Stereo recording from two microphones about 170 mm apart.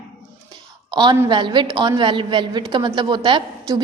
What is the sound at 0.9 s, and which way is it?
A woman's voice, 25° right (ahead or behind).